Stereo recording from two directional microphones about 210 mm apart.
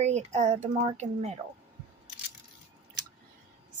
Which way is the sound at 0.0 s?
30° right (ahead or behind).